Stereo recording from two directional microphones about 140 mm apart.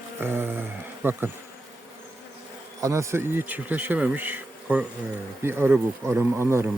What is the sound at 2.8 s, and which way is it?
Speech, 20° right (ahead or behind).